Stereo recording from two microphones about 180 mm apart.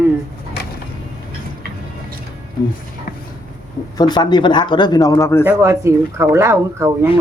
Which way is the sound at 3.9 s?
20° left (ahead or behind).